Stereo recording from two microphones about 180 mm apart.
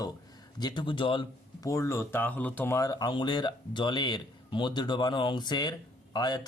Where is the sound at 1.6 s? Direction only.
15° left (ahead or behind).